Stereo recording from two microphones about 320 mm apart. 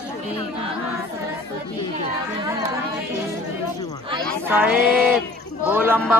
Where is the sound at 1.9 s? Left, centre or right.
Centre.